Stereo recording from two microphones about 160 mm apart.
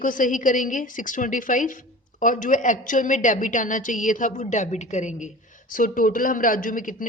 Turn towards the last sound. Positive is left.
turn(degrees=55)  # may be behind; listen again after turning